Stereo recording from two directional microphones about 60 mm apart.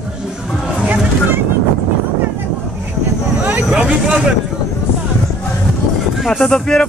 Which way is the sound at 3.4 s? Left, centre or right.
Right.